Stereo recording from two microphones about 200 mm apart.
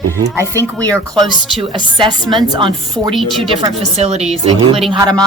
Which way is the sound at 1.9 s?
25° right (ahead or behind).